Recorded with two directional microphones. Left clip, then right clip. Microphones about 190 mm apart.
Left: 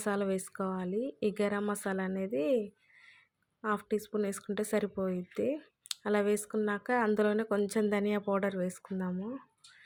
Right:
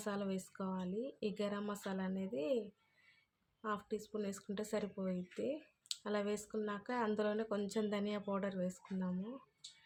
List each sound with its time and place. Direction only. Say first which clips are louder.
0.0 s speech: left 9 dB; 40° left (ahead or behind)